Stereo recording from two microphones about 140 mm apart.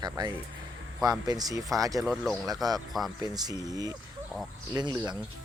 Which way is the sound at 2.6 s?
25° right (ahead or behind).